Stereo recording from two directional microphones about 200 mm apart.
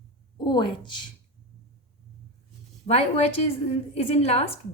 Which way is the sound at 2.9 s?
30° left (ahead or behind).